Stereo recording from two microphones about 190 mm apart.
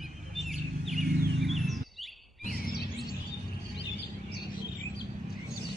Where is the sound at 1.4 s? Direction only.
Centre (ahead or behind).